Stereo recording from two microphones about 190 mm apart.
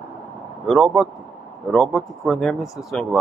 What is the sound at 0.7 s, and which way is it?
Speech, centre (ahead or behind).